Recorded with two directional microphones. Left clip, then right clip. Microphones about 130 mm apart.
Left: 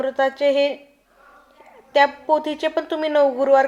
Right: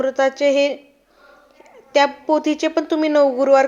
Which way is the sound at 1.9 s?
35° right (ahead or behind).